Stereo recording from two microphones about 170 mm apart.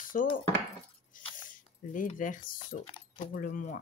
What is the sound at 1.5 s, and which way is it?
Speech, 50° left (ahead or behind).